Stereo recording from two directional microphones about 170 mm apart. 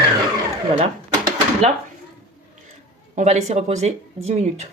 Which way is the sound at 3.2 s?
45° right (ahead or behind).